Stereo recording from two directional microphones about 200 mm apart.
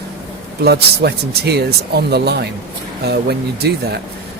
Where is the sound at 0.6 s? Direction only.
55° right (ahead or behind).